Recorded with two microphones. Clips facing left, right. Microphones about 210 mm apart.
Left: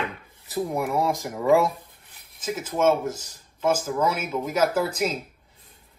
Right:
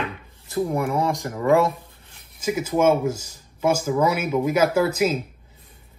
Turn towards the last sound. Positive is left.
turn(degrees=-5)  # may be behind; listen again after turning